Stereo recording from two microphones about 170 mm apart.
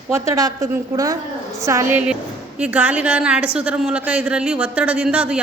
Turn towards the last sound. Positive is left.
turn(degrees=-5)  # may be behind; listen again after turning